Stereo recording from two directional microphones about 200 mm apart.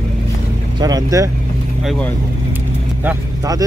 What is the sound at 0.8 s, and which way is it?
Speech, 20° right (ahead or behind).